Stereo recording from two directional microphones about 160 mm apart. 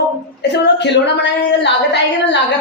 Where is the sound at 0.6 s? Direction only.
90° left.